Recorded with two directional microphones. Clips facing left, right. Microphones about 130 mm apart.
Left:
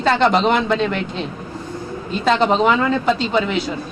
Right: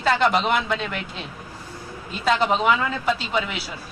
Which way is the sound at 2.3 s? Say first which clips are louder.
Left 4 dB; 30° left (ahead or behind).